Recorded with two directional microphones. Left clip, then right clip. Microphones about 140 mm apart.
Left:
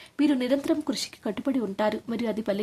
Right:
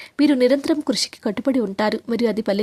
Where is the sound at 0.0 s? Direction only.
40° right (ahead or behind).